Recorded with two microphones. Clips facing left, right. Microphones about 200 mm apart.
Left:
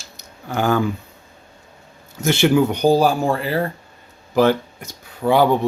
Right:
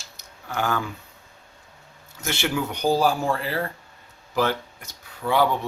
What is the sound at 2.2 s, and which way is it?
Speech, 20° left (ahead or behind).